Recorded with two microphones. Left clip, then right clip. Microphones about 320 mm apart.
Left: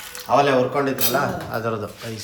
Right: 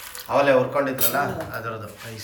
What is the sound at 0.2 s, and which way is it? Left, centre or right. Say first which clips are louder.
A man's voice: left 1 dB; centre.